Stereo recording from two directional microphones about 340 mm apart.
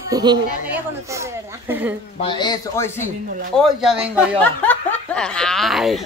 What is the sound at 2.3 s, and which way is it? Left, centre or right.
A man's voice, centre.